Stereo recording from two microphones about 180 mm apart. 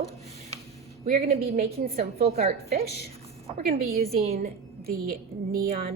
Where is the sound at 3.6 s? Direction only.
55° right (ahead or behind).